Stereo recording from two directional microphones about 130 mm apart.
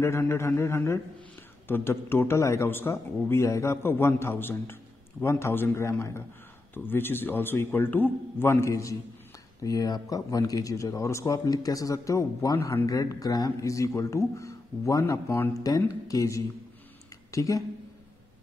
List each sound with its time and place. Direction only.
0.0 s a man's voice: 20° left (ahead or behind)